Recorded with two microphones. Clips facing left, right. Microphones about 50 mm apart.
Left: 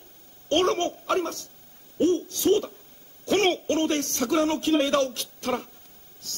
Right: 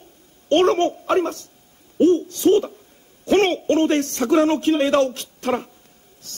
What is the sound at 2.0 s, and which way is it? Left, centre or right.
Hoot, centre.